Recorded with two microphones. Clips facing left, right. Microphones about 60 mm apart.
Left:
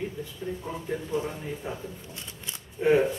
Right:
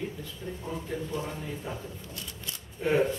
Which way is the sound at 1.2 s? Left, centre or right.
Centre.